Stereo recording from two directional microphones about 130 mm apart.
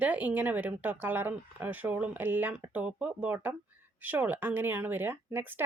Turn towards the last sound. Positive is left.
turn(degrees=-15)  # may be behind; listen again after turning